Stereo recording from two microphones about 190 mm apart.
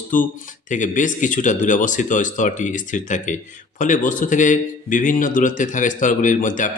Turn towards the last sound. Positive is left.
turn(degrees=45)  # may be behind; listen again after turning